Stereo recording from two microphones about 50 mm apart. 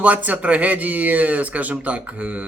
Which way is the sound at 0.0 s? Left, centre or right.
Right.